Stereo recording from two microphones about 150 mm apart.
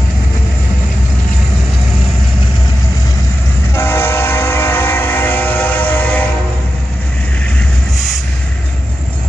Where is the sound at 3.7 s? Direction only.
15° left (ahead or behind).